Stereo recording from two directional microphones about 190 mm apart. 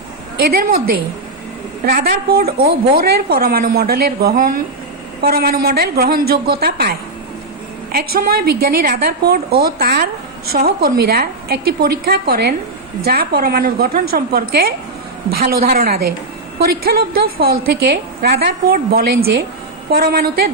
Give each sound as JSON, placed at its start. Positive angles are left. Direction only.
{"t": 0.3, "sound": "a woman's voice", "side_deg": -50}
{"t": 1.8, "sound": "a woman's voice", "side_deg": -50}
{"t": 7.9, "sound": "a woman's voice", "side_deg": -55}